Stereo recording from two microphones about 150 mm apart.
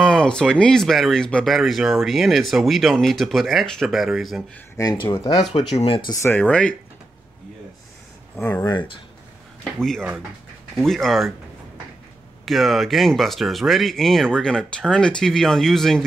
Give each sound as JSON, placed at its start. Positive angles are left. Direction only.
{"t": 0.0, "sound": "speech", "side_deg": 5}
{"t": 4.7, "sound": "speech", "side_deg": 30}
{"t": 6.2, "sound": "speech", "side_deg": 10}
{"t": 8.4, "sound": "speech", "side_deg": 10}
{"t": 8.6, "sound": "speech", "side_deg": 30}
{"t": 9.8, "sound": "speech", "side_deg": 5}
{"t": 12.4, "sound": "speech", "side_deg": 0}